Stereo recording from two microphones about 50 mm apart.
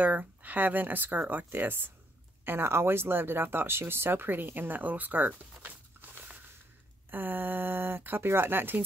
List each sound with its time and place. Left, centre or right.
0.0 s speech: right